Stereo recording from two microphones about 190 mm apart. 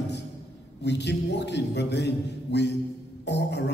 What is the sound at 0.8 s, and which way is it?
A man's voice, 65° left (ahead or behind).